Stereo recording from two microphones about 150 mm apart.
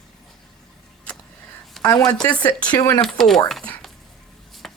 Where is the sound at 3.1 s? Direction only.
Centre (ahead or behind).